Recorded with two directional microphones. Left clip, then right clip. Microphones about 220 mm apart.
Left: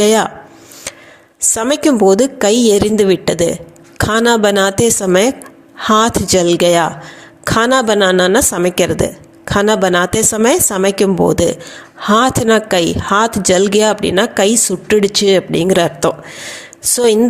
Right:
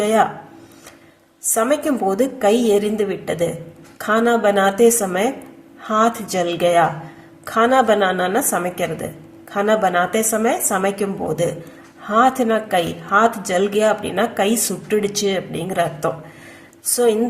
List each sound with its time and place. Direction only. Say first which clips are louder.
0.0 s speech: left 5 dB; 40° left (ahead or behind)
1.5 s speech: left 4 dB; 40° left (ahead or behind)